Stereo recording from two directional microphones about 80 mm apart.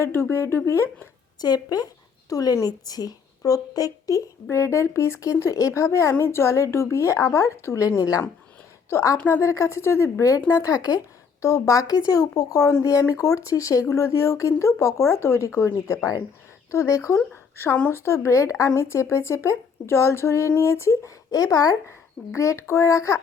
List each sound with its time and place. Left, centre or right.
0.0 s speech: left
1.4 s a woman's voice: left
4.4 s speech: left
9.1 s speech: left
9.4 s a woman's voice: left
11.4 s a woman's voice: left
21.2 s a woman's voice: left
21.8 s speech: left